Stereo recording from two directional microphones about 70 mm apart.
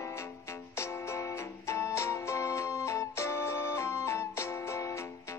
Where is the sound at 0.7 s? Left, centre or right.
Left.